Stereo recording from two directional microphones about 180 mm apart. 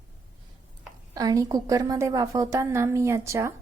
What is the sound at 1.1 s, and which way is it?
A woman's voice, 20° right (ahead or behind).